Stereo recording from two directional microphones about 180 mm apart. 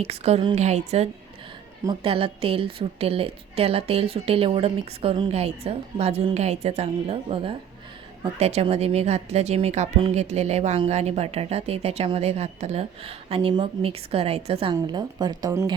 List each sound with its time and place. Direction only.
0.0 s a woman's voice: 35° right (ahead or behind); by 15.7 s 20° right (ahead or behind)